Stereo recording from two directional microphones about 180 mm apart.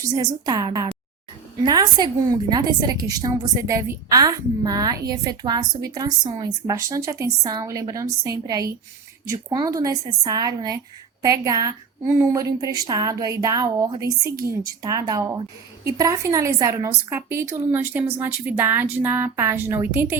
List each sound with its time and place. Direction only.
0.0 s a woman's voice: 20° right (ahead or behind)